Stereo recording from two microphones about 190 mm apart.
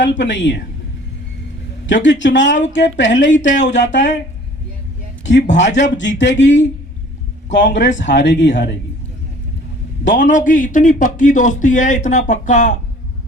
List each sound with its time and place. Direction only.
0.2 s speech: 70° left (ahead or behind)
1.9 s speech: 75° left (ahead or behind)
5.4 s speech: 40° left (ahead or behind)
6.0 s speech: 70° left (ahead or behind)
10.2 s speech: 40° left (ahead or behind)